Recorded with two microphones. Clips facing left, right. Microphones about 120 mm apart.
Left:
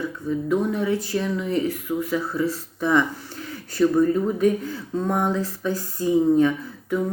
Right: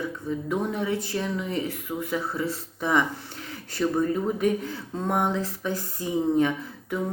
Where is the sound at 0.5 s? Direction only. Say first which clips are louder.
Left 5 dB; 20° right (ahead or behind).